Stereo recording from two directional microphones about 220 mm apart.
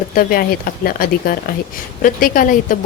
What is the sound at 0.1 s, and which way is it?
A woman's voice, 40° left (ahead or behind).